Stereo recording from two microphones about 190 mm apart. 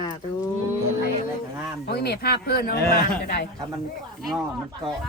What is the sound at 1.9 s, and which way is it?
Speech, 60° left (ahead or behind).